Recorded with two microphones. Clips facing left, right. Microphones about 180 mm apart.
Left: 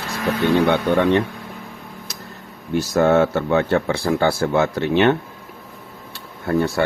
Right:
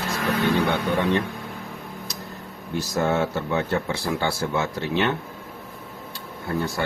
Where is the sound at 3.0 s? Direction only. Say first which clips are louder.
Left 7 dB; 65° left (ahead or behind).